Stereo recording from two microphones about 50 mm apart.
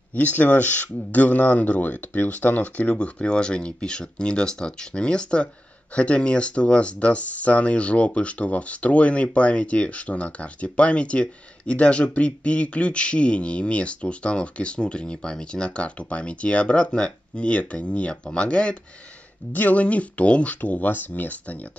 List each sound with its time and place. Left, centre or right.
0.1 s speech: left
19.5 s speech: left